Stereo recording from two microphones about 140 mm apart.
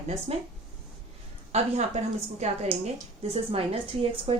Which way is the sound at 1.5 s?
50° right (ahead or behind).